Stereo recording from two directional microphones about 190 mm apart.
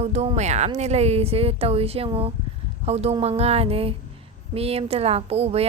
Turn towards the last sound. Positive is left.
turn(degrees=-30)  # may be behind; listen again after turning